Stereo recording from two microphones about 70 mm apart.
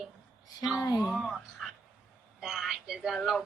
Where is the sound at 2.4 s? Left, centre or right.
Centre.